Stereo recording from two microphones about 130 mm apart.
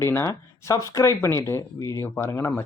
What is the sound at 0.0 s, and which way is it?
Speech, 20° left (ahead or behind).